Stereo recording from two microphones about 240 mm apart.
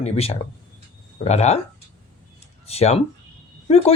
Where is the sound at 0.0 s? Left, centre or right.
Left.